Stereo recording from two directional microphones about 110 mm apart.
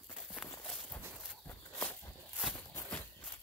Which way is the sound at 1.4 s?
15° left (ahead or behind).